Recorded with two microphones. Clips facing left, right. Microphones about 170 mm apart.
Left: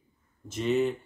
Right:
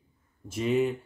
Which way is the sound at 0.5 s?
5° right (ahead or behind).